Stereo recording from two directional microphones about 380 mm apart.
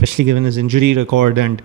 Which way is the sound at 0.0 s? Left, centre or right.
Right.